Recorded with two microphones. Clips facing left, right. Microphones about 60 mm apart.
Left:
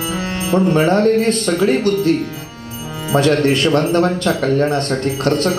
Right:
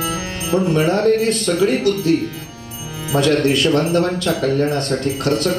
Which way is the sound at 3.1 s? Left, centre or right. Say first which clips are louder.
Left 2 dB; left.